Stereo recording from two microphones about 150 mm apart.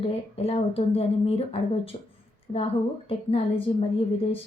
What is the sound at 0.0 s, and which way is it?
A woman's voice, 40° left (ahead or behind).